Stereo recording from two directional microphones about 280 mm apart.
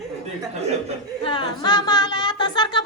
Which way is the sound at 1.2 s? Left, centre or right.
Centre.